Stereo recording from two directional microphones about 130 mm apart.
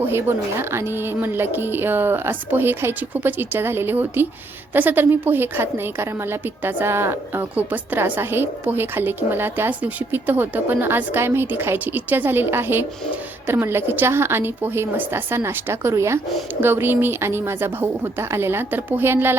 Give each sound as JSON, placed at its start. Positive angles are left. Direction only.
{"t": 0.1, "sound": "a woman's voice", "side_deg": -20}